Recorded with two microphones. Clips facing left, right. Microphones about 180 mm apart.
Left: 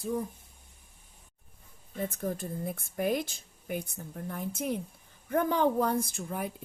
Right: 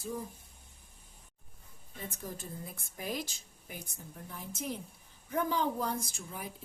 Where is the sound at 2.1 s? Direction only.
55° left (ahead or behind).